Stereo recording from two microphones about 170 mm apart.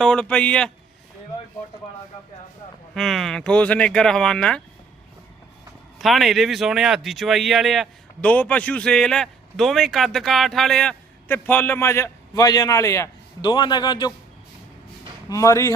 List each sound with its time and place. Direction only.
0.0 s speech: 5° left (ahead or behind)
2.9 s speech: centre (ahead or behind)
6.0 s speech: centre (ahead or behind); by 14.1 s 25° left (ahead or behind)
15.3 s speech: 20° left (ahead or behind)